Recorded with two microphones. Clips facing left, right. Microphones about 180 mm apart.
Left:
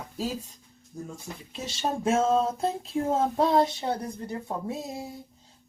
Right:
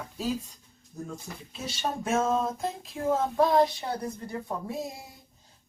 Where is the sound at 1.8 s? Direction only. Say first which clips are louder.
Left 3 dB; 30° left (ahead or behind).